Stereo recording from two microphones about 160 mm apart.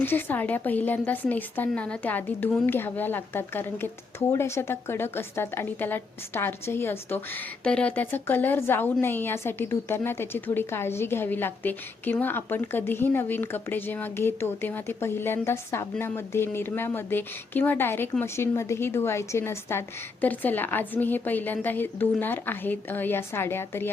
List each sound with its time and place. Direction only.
0.0 s a woman's voice: 10° left (ahead or behind)